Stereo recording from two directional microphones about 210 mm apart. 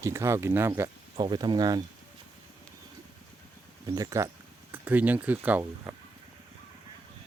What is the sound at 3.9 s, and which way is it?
Speech, 15° right (ahead or behind).